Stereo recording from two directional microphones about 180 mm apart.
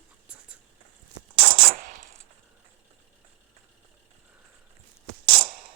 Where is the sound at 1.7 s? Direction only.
45° right (ahead or behind).